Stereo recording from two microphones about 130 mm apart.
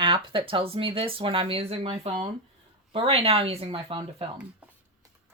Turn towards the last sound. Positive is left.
turn(degrees=-45)  # may be behind; listen again after turning